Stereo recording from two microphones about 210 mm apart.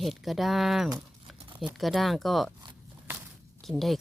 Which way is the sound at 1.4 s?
25° right (ahead or behind).